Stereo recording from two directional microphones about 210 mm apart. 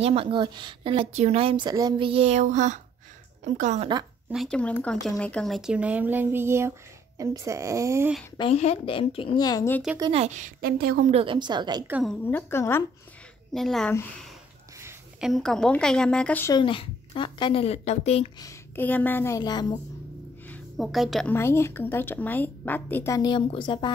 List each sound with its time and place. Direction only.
0.0 s a woman's voice: 25° right (ahead or behind)
4.3 s speech: centre (ahead or behind); by 8.1 s 15° right (ahead or behind)
8.4 s a woman's voice: 30° left (ahead or behind); by 9.8 s 10° left (ahead or behind)
9.9 s speech: 25° right (ahead or behind); by 11.1 s 45° right (ahead or behind)
11.1 s a woman's voice: 25° right (ahead or behind)
11.9 s a woman's voice: centre (ahead or behind)
16.5 s a woman's voice: 25° left (ahead or behind)
18.4 s a woman's voice: 10° left (ahead or behind)
20.4 s a woman's voice: 5° left (ahead or behind); by 23.9 s 25° left (ahead or behind)